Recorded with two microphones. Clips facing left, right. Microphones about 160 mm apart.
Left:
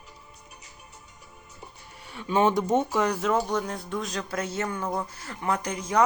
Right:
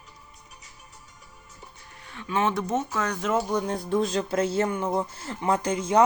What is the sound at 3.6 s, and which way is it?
Speech, 35° right (ahead or behind).